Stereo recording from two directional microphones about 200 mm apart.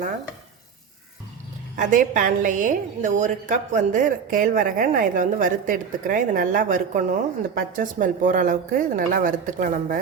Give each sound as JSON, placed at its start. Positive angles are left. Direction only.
{"t": 1.7, "sound": "a woman's voice", "side_deg": -40}